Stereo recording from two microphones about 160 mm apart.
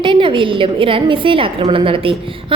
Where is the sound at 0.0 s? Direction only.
30° right (ahead or behind).